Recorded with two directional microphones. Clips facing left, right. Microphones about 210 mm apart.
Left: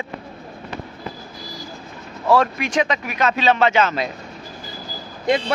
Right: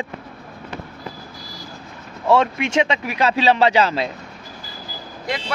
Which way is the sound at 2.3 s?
20° right (ahead or behind).